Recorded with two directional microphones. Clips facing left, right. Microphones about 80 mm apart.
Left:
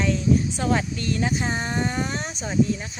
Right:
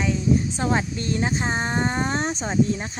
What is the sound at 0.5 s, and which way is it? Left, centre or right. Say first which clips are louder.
Speech: even; right.